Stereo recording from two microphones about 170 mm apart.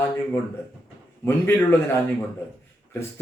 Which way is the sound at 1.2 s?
15° left (ahead or behind).